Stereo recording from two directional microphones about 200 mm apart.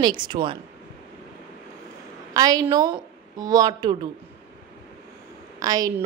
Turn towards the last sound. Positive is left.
turn(degrees=-20)  # may be behind; listen again after turning